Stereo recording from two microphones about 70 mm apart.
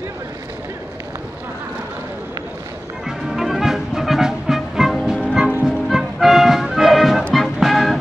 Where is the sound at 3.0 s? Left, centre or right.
Centre.